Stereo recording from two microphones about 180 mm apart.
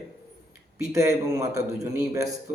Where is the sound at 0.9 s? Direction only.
15° right (ahead or behind).